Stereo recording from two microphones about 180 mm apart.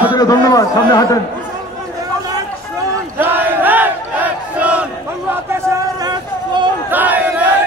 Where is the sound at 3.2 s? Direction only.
10° right (ahead or behind).